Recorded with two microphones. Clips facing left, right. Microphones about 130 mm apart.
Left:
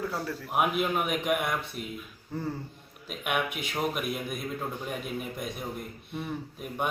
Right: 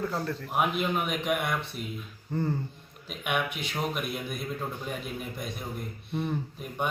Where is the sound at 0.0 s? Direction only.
5° left (ahead or behind).